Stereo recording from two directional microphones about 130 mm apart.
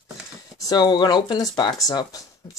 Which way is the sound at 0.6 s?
30° left (ahead or behind).